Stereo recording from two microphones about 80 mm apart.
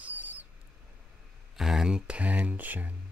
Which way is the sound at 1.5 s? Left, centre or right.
Centre.